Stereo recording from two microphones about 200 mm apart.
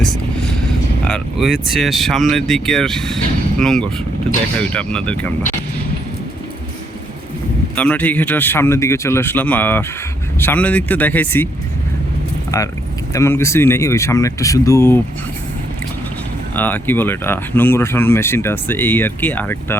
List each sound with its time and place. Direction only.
0.0 s vehicle: centre (ahead or behind)
1.0 s speech: centre (ahead or behind)
7.8 s speech: 5° left (ahead or behind)
12.5 s speech: 15° left (ahead or behind)
16.6 s speech: 10° left (ahead or behind)